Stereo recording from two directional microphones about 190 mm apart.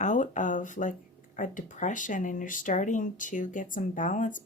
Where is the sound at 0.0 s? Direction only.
40° left (ahead or behind).